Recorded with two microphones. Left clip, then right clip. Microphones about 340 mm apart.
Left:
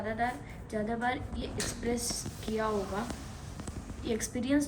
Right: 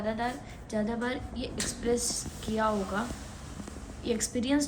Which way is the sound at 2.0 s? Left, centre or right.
Right.